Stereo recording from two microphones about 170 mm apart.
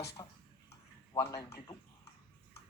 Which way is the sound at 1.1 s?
20° left (ahead or behind).